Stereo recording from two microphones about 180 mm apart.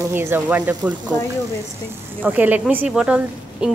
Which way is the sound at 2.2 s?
10° right (ahead or behind).